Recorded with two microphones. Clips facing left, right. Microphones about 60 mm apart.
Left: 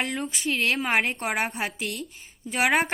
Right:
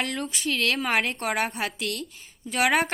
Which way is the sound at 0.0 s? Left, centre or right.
Centre.